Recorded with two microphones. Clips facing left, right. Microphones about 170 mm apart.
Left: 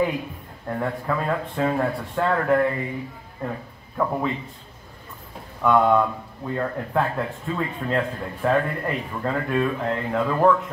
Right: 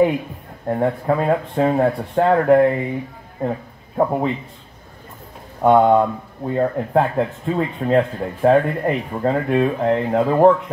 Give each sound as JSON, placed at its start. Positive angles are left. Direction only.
{"t": 0.7, "sound": "speech", "side_deg": -35}
{"t": 5.6, "sound": "speech", "side_deg": -40}